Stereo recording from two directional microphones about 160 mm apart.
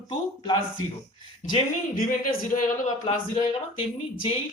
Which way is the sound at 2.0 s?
60° left (ahead or behind).